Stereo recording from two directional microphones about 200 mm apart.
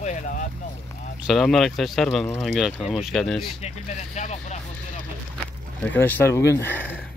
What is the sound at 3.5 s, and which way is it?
Speech, 35° left (ahead or behind).